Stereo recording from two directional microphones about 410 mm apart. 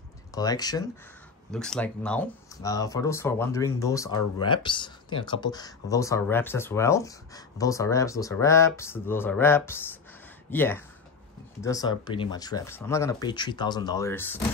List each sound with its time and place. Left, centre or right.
0.3 s speech: centre